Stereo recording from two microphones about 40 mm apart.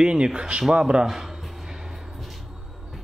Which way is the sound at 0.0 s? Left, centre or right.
Right.